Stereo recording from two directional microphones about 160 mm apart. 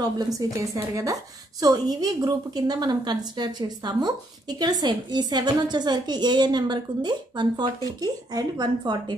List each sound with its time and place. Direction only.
0.4 s a woman's voice: 20° right (ahead or behind)